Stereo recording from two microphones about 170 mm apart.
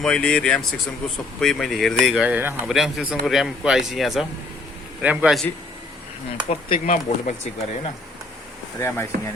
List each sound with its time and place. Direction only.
0.0 s speech: 5° left (ahead or behind)
6.7 s speech: 45° left (ahead or behind)
8.8 s speech: 15° left (ahead or behind)